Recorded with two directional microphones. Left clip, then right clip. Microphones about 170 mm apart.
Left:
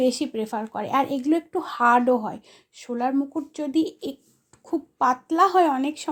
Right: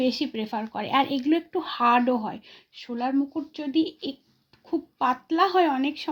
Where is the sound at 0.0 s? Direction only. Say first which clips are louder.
Left 3 dB; 25° left (ahead or behind).